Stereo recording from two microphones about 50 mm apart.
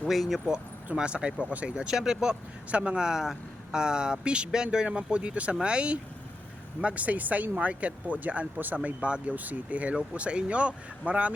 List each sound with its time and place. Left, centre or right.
0.0 s speech: centre
0.9 s speech: right